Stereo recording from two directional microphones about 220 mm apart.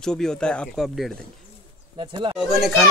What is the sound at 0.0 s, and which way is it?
Speech, 5° left (ahead or behind).